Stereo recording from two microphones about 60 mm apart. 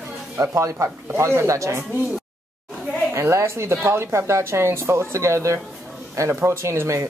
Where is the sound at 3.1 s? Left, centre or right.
Right.